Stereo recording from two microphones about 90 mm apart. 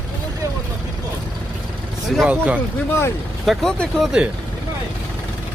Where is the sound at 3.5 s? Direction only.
10° left (ahead or behind).